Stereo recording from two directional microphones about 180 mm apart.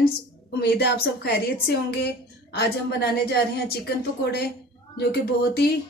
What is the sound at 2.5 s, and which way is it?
A woman's voice, 65° left (ahead or behind).